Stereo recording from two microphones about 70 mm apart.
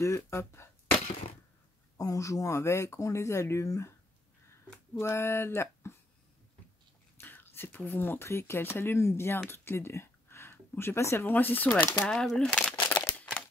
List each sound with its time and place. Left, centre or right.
0.0 s speech: left
2.0 s speech: left
5.0 s speech: left
7.2 s speech: left
11.2 s speech: left
12.0 s speech: centre
12.7 s a sound: left